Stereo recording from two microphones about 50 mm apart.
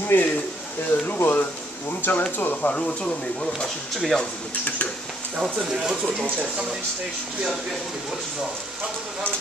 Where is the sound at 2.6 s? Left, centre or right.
Left.